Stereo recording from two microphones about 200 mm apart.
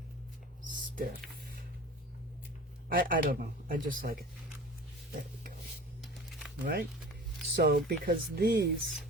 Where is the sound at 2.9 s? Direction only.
45° right (ahead or behind).